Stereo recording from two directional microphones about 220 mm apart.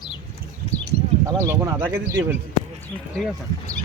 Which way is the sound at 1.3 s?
15° right (ahead or behind).